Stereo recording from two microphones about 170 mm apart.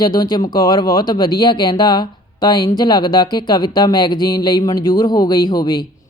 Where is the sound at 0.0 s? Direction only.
25° left (ahead or behind).